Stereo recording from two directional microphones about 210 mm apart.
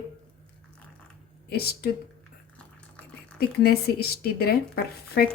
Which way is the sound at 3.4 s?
50° left (ahead or behind).